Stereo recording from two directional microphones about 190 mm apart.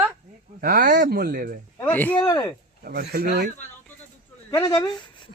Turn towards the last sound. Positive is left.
turn(degrees=25)  # may be behind; listen again after turning